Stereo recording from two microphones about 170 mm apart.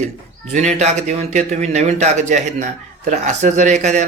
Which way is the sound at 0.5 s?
40° right (ahead or behind).